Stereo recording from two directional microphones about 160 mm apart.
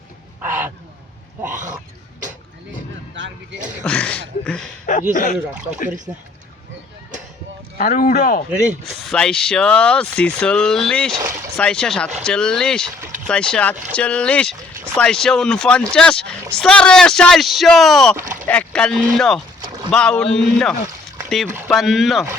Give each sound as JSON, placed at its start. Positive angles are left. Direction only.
{"t": 0.4, "sound": "a sound", "side_deg": -10}
{"t": 3.8, "sound": "speech", "side_deg": 10}
{"t": 5.1, "sound": "speech", "side_deg": 55}
{"t": 7.8, "sound": "speech", "side_deg": 55}
{"t": 9.0, "sound": "speech", "side_deg": 0}